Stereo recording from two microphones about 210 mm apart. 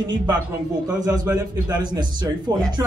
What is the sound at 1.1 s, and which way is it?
Speech, 20° right (ahead or behind).